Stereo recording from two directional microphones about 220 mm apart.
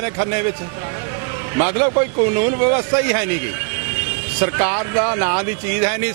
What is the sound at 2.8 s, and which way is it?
Speech, 20° right (ahead or behind).